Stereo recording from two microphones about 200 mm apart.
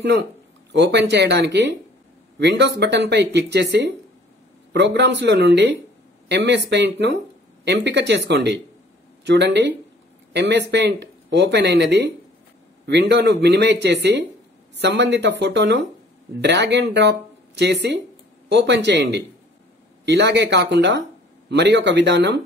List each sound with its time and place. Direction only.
0.7 s speech: 60° right (ahead or behind)
13.1 s speech: 60° right (ahead or behind)